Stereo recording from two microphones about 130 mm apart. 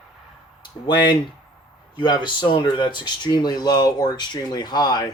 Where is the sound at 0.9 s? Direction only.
35° left (ahead or behind).